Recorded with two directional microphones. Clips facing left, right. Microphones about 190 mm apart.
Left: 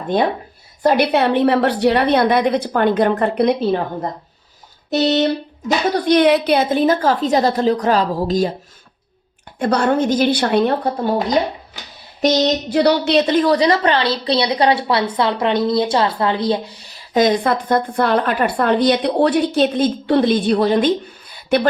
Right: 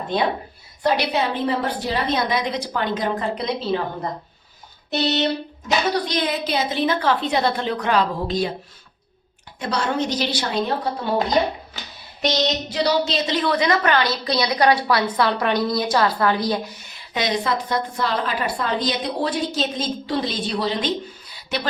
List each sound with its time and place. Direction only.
0.8 s a woman's voice: 50° left (ahead or behind)
4.9 s a woman's voice: 45° left (ahead or behind)
5.9 s a woman's voice: 60° left (ahead or behind); by 8.5 s 40° left (ahead or behind)
9.6 s a woman's voice: 55° left (ahead or behind)
12.2 s a woman's voice: 45° left (ahead or behind)